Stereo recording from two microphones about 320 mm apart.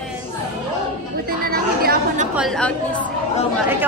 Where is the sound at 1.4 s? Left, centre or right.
Right.